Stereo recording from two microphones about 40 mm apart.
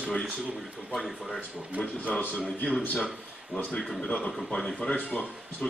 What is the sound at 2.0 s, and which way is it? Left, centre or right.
Speech, left.